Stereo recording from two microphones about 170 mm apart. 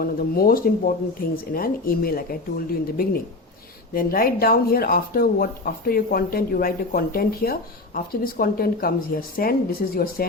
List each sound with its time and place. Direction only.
0.0 s speech: 60° left (ahead or behind)